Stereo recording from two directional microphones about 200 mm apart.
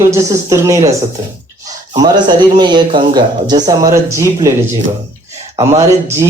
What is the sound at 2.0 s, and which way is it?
Speech, 20° right (ahead or behind).